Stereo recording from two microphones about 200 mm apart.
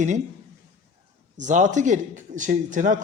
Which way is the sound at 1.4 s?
40° right (ahead or behind).